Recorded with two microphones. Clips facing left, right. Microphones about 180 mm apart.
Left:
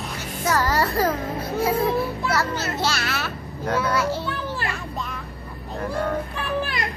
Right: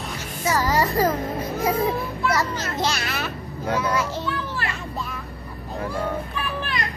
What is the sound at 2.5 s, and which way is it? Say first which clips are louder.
Speech: even; 5° left (ahead or behind).